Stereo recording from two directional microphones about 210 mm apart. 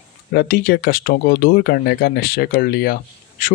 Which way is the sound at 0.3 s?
45° left (ahead or behind).